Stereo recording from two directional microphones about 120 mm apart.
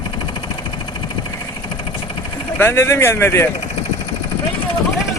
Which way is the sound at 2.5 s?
20° left (ahead or behind).